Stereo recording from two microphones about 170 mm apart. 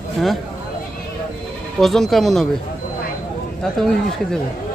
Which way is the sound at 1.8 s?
Centre (ahead or behind).